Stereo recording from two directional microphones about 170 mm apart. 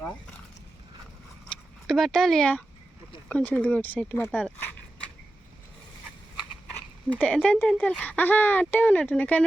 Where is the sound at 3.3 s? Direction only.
10° left (ahead or behind).